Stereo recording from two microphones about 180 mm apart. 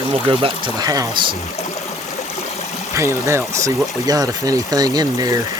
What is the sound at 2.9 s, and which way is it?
Speech, 15° right (ahead or behind).